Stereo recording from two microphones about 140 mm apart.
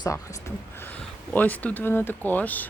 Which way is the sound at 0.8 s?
10° left (ahead or behind).